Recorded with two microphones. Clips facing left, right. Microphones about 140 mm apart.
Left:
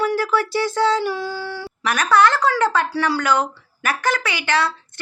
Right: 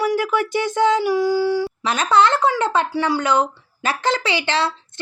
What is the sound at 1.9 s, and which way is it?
Speech, 25° right (ahead or behind).